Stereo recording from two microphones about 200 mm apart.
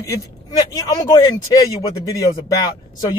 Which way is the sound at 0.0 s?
15° left (ahead or behind).